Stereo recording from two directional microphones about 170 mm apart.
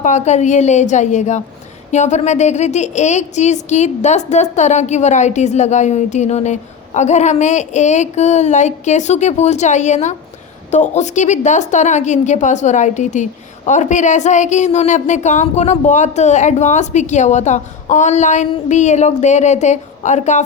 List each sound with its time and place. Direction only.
0.0 s a woman's voice: 45° left (ahead or behind)